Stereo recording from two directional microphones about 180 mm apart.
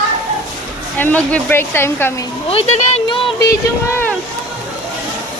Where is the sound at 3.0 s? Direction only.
30° left (ahead or behind).